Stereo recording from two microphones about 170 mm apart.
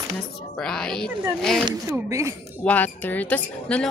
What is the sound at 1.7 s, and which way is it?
Speech, 20° right (ahead or behind).